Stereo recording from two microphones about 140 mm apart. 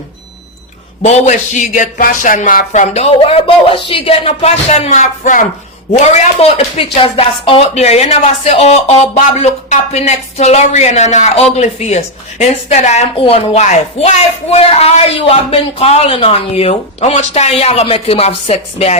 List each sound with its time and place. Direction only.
1.0 s a man's voice: 55° left (ahead or behind)
2.9 s speech: 45° left (ahead or behind)
5.9 s speech: 50° left (ahead or behind)